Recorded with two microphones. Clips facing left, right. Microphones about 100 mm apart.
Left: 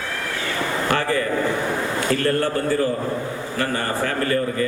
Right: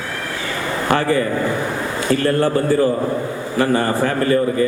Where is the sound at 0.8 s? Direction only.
15° right (ahead or behind).